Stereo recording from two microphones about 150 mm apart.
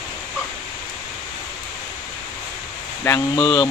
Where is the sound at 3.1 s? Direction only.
20° left (ahead or behind).